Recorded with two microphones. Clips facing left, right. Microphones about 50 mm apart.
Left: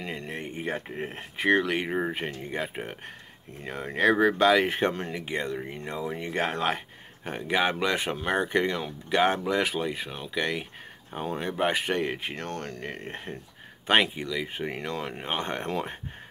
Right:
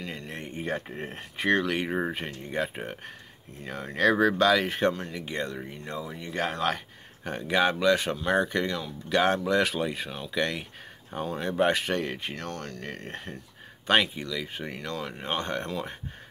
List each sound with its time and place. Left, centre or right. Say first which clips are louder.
0.3 s speech: right 1 dB; centre
3.6 s speech: left 1 dB; left
5.2 s speech: left 1 dB; centre
7.2 s speech: right 1 dB; centre
12.4 s speech: left 2 dB; left
12.8 s speech: left 1 dB; centre
14.7 s speech: left 2 dB; left